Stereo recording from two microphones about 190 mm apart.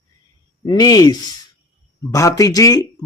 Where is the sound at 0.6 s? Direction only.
20° left (ahead or behind).